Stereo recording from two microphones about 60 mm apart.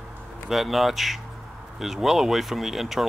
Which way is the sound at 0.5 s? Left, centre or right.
Centre.